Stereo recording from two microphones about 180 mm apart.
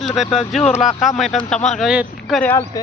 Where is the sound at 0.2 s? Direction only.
Centre (ahead or behind).